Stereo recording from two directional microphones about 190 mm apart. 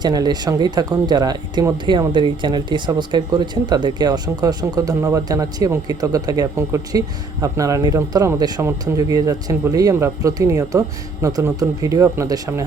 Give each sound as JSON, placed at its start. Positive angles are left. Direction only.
{"t": 0.0, "sound": "speech", "side_deg": -20}